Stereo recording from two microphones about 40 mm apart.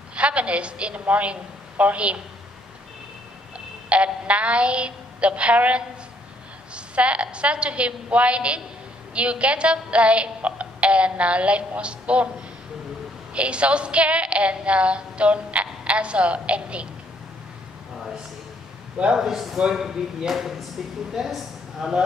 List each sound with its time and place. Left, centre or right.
0.1 s a woman's voice: right
3.5 s a woman's voice: right
17.9 s a sound: centre
19.1 s speech: centre